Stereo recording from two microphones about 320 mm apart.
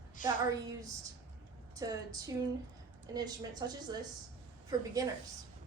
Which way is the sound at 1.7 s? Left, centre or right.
Centre.